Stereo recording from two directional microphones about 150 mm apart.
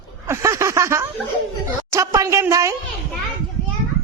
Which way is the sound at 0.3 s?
20° right (ahead or behind).